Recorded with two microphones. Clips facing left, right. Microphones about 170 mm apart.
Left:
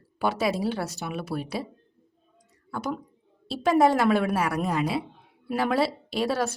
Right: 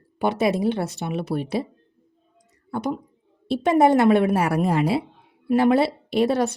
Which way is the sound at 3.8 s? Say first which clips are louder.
Right 6 dB; 25° right (ahead or behind).